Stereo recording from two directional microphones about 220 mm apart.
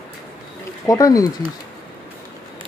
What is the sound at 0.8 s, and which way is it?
Speech, 15° left (ahead or behind).